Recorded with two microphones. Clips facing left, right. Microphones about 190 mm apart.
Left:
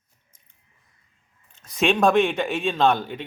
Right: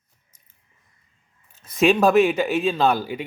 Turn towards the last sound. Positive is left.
turn(degrees=-5)  # may be behind; listen again after turning